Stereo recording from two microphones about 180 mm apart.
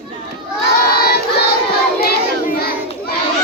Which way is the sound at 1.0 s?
60° left (ahead or behind).